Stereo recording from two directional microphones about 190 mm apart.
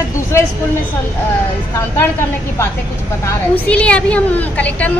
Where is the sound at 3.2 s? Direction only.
10° left (ahead or behind).